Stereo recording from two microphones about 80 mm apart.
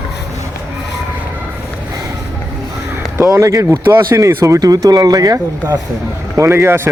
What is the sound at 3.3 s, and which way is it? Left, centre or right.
Speech, right.